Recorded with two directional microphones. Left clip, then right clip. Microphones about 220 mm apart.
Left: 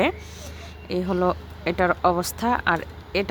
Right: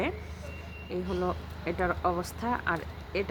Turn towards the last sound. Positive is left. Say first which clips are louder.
# left 7 dB
turn(degrees=50)  # may be behind; listen again after turning